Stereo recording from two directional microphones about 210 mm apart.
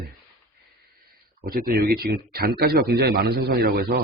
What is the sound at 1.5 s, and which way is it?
Speech, 45° right (ahead or behind).